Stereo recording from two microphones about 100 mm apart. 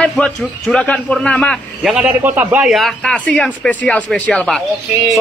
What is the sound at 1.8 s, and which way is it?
Speech, 10° right (ahead or behind).